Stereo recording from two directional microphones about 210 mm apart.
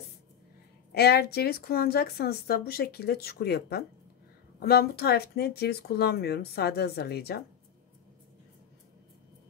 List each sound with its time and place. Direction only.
0.9 s speech: 50° left (ahead or behind)